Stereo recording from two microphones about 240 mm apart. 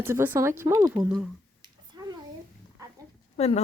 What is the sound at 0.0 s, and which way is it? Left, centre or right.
Speech, centre.